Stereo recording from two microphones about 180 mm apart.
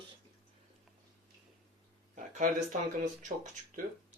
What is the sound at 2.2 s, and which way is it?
Speech, 45° right (ahead or behind).